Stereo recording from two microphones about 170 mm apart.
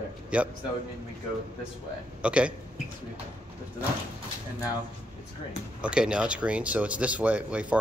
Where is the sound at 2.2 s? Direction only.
5° right (ahead or behind).